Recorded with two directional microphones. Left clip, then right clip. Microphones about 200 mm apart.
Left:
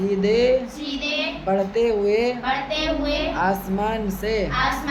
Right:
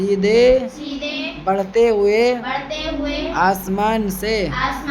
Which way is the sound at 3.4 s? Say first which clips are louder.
Right 5 dB; 35° right (ahead or behind).